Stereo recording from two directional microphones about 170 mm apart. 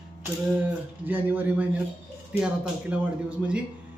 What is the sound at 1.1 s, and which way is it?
Speech, 10° right (ahead or behind).